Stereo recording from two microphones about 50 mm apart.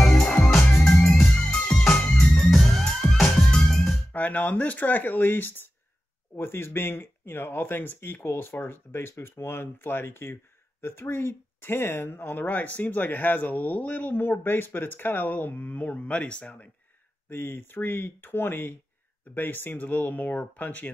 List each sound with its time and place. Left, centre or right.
0.0 s music: centre
4.1 s speech: left
17.3 s speech: left